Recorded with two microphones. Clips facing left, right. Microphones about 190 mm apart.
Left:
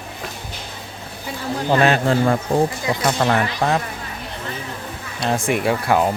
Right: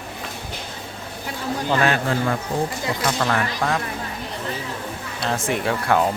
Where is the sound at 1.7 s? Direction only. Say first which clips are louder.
Left 5 dB; 25° left (ahead or behind).